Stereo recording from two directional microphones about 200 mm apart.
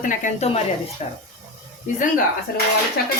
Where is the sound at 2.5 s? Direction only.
50° left (ahead or behind).